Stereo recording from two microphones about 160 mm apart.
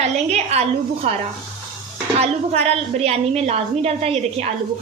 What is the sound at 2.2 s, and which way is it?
A woman's voice, 40° right (ahead or behind).